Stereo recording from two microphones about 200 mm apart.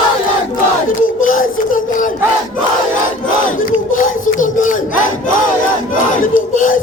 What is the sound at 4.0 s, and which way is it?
Speech, 40° left (ahead or behind).